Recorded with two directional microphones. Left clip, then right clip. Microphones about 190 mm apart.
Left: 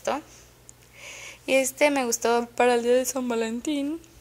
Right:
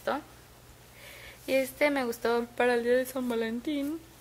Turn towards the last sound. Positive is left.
turn(degrees=20)  # may be behind; listen again after turning